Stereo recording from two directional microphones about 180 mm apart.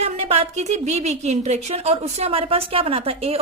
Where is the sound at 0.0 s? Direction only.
35° right (ahead or behind).